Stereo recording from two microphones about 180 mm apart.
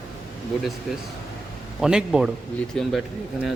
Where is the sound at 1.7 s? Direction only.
5° right (ahead or behind).